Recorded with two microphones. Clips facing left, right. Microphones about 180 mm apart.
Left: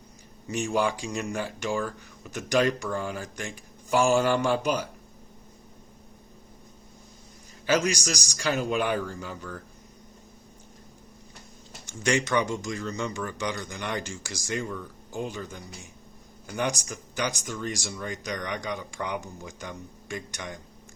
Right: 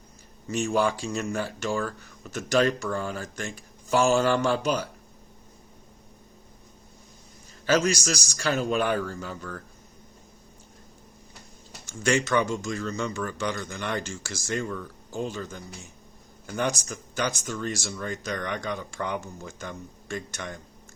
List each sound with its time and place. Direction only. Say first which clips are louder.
0.4 s speech: right 2 dB; 15° left (ahead or behind)
7.7 s speech: right 2 dB; 15° left (ahead or behind)
11.9 s speech: right 1 dB; 20° left (ahead or behind)